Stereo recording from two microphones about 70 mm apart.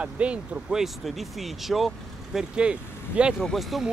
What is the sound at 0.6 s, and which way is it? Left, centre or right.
Speech, centre.